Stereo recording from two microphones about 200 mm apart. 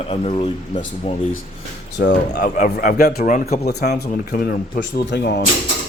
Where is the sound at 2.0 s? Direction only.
45° left (ahead or behind).